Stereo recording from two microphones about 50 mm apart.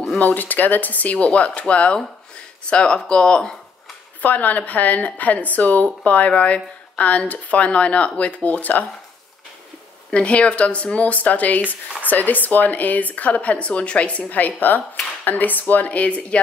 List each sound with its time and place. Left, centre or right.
0.2 s speech: left; by 3.5 s centre
4.2 s speech: left
10.1 s speech: left